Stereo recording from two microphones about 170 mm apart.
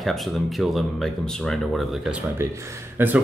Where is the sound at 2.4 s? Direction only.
15° right (ahead or behind).